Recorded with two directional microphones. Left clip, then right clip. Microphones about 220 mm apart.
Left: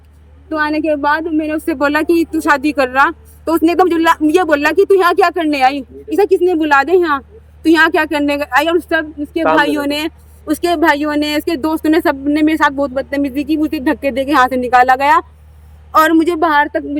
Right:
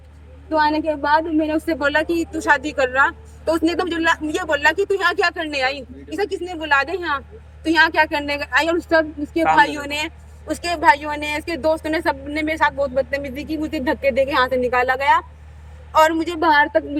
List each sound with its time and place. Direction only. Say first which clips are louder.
0.5 s a woman's voice: left 3 dB; 10° left (ahead or behind)